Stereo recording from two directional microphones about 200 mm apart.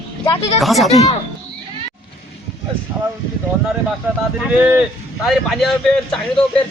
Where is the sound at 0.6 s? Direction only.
Centre (ahead or behind).